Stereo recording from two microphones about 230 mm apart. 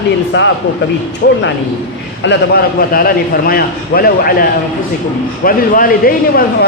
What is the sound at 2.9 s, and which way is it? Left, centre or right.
A man's voice, left.